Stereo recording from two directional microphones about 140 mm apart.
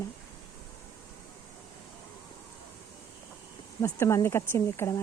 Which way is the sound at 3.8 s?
20° left (ahead or behind).